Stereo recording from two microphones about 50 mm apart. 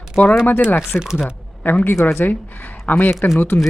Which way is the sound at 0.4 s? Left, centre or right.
Left.